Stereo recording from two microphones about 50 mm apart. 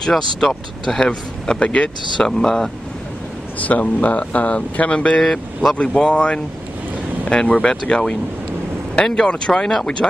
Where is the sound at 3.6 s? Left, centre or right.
Left; by 10.1 s centre.